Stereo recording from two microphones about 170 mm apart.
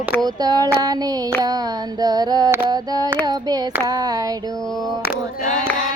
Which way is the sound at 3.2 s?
20° right (ahead or behind).